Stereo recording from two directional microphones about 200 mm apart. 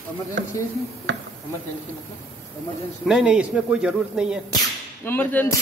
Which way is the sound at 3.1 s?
5° right (ahead or behind).